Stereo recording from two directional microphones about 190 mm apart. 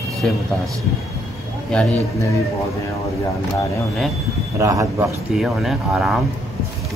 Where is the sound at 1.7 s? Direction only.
5° left (ahead or behind).